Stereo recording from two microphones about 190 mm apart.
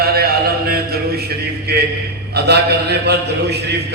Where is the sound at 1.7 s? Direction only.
60° right (ahead or behind).